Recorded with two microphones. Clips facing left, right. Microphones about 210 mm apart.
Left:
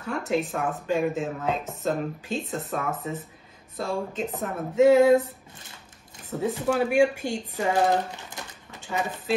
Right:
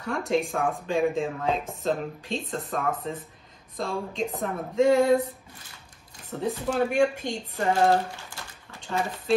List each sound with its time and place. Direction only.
0.0 s speech: 5° left (ahead or behind)
6.2 s speech: 10° left (ahead or behind)
8.4 s a sound: 20° left (ahead or behind)
8.8 s speech: 5° left (ahead or behind)